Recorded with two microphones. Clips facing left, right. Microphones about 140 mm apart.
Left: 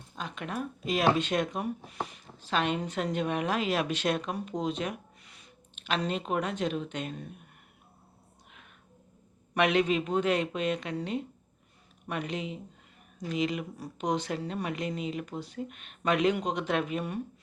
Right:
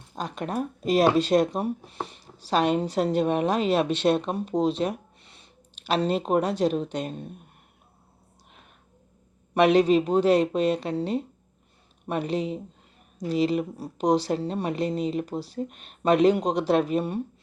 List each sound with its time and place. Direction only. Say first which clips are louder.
0.2 s speech: right 6 dB; 40° right (ahead or behind)
9.6 s speech: right 7 dB; 35° right (ahead or behind)